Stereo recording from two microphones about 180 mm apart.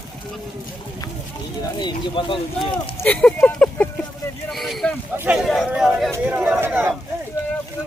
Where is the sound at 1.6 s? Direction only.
25° left (ahead or behind).